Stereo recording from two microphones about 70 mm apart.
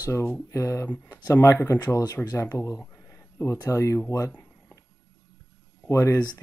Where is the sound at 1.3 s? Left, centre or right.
Left.